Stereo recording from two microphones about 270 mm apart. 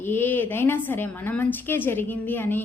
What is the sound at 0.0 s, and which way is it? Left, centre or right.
A woman's voice, centre.